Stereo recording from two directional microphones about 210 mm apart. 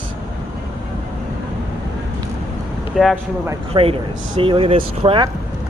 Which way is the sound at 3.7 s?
25° right (ahead or behind).